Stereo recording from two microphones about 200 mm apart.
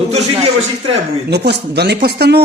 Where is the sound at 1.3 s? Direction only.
55° right (ahead or behind).